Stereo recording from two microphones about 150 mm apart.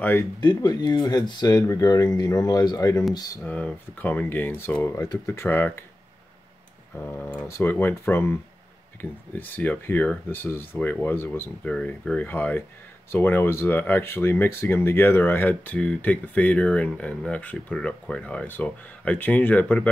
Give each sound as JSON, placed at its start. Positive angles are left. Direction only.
{"t": 0.4, "sound": "speech", "side_deg": 25}
{"t": 3.4, "sound": "speech", "side_deg": 10}
{"t": 7.4, "sound": "speech", "side_deg": 15}